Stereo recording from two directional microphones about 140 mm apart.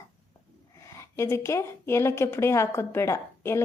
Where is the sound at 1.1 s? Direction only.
20° left (ahead or behind).